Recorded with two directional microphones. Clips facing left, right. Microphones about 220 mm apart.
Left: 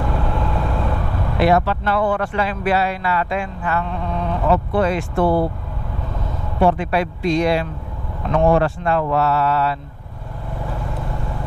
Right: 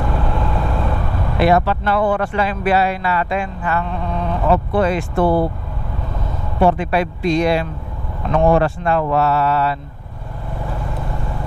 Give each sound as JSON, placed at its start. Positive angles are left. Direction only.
{"t": 0.0, "sound": "speech", "side_deg": -25}
{"t": 5.2, "sound": "speech", "side_deg": -30}
{"t": 6.8, "sound": "speech", "side_deg": -10}